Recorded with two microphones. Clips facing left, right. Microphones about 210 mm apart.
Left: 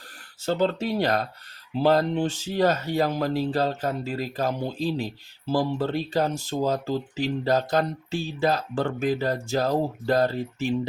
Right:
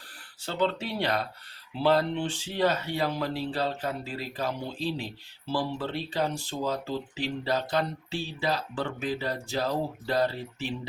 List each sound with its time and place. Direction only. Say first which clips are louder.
0.4 s speech: left 5 dB; 40° left (ahead or behind)